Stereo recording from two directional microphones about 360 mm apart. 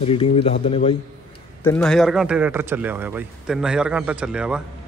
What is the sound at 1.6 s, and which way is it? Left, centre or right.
A man's voice, centre.